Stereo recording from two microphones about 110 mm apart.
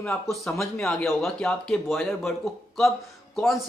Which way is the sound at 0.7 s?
5° left (ahead or behind).